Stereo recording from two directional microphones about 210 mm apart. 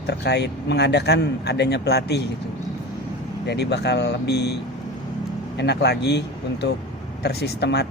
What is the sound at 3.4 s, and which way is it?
Speech, 50° left (ahead or behind).